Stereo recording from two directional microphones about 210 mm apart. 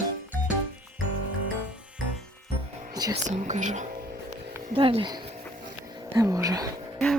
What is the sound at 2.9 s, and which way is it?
Whispering, 20° right (ahead or behind).